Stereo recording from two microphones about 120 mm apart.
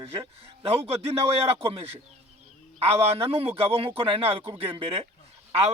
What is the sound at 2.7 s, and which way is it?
A man's voice, 55° right (ahead or behind).